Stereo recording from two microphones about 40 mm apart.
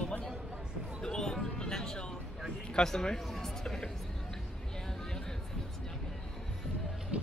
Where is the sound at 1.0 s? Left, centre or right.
Centre.